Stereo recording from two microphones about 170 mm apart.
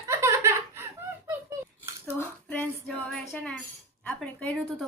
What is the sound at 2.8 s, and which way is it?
Music, centre (ahead or behind).